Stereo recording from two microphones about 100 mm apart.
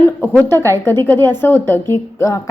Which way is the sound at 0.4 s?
25° left (ahead or behind).